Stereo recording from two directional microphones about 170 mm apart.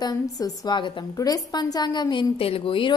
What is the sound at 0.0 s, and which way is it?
A woman's voice, 25° left (ahead or behind).